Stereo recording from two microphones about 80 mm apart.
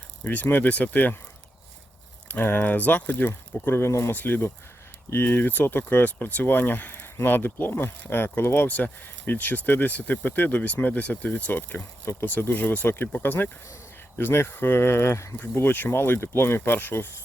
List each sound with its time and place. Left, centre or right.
0.3 s speech: left
2.2 s speech: left
15.4 s speech: left